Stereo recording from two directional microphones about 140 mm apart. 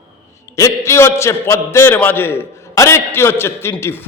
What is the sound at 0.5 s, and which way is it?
A man's voice, 20° left (ahead or behind).